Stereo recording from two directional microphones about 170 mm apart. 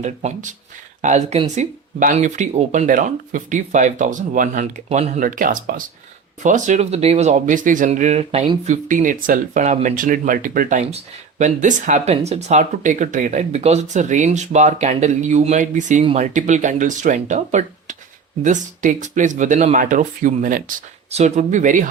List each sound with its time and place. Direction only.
0.0 s speech: 40° right (ahead or behind)
21.1 s speech: 40° right (ahead or behind)